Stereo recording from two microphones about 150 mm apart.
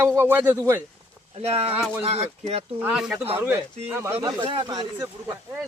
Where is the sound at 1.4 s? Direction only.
40° right (ahead or behind).